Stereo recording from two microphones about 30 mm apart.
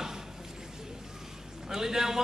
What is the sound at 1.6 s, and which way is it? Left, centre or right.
Speech, centre.